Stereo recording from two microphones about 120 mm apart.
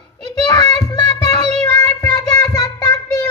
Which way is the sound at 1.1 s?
35° left (ahead or behind).